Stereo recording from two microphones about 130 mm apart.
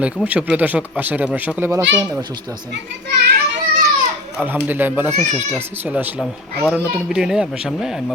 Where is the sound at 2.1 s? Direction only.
30° right (ahead or behind).